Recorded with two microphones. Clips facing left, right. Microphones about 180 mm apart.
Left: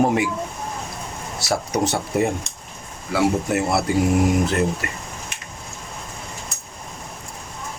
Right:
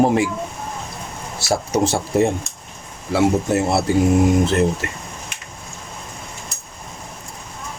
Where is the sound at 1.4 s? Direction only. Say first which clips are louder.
Right 3 dB; 25° right (ahead or behind).